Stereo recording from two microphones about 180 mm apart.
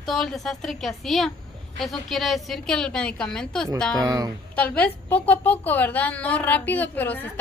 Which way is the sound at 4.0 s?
20° right (ahead or behind).